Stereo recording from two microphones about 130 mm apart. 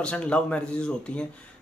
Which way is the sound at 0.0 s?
10° left (ahead or behind).